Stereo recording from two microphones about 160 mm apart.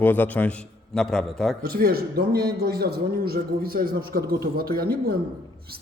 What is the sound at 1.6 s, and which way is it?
A man's voice, 70° right (ahead or behind).